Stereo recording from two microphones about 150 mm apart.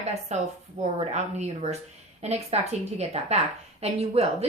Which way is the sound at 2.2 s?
45° right (ahead or behind).